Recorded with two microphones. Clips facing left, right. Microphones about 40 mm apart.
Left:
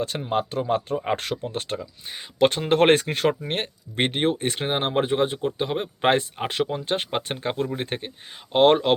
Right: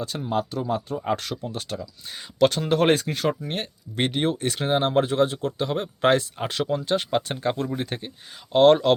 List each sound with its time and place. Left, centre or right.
0.0 s speech: left